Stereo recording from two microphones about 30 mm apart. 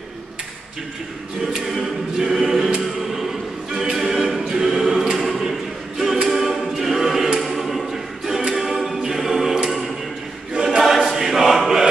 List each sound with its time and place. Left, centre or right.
1.4 s choir: centre
2.8 s music: centre
3.9 s a capella: centre
4.5 s choir: centre
5.1 s a capella: centre
7.3 s choir: centre
8.5 s a capella: centre
10.5 s choir: right
10.8 s choir: centre